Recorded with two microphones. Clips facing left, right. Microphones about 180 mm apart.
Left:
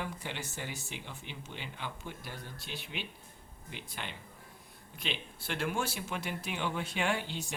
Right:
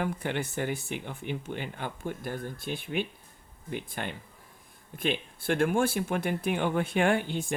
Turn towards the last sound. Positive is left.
turn(degrees=-50)  # may be behind; listen again after turning